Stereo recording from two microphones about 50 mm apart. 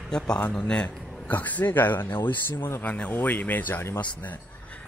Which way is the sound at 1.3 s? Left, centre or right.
Left.